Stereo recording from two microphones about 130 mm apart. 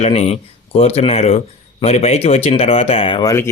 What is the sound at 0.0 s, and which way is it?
Speech, 55° left (ahead or behind).